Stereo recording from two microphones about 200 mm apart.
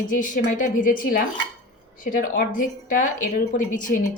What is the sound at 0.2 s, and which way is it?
A woman's voice, 40° left (ahead or behind).